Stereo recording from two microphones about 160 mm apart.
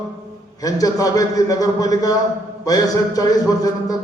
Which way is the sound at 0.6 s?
20° left (ahead or behind).